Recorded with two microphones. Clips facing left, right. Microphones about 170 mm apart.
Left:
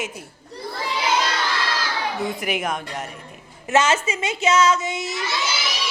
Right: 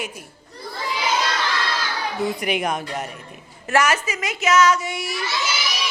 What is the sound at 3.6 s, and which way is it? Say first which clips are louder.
A woman's voice: left 1 dB; 25° left (ahead or behind).